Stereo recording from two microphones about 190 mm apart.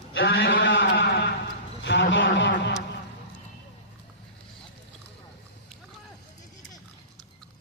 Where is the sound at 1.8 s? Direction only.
75° left (ahead or behind).